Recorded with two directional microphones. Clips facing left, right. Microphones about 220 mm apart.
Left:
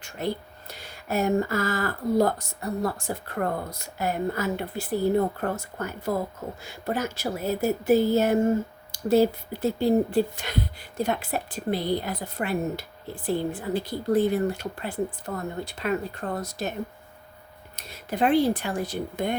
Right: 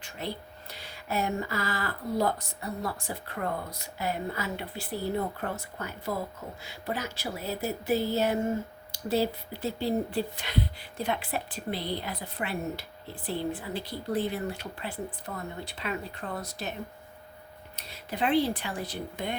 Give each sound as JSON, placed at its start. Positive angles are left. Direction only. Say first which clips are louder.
{"t": 0.0, "sound": "speech", "louder": "left 7 dB", "side_deg": 45}
{"t": 17.7, "sound": "speech", "louder": "left 6 dB", "side_deg": 45}